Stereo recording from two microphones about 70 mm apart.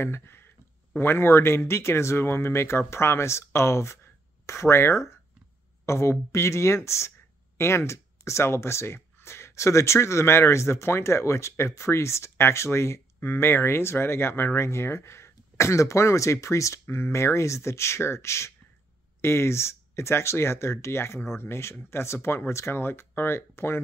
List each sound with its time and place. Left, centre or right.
0.0 s speech: left
16.8 s speech: left